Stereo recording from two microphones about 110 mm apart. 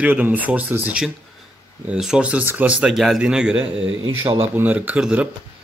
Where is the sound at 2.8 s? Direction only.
Centre (ahead or behind).